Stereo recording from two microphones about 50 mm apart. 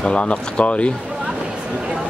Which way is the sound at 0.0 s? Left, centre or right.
Left.